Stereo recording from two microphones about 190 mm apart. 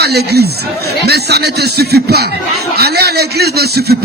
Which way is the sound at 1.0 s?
60° right (ahead or behind).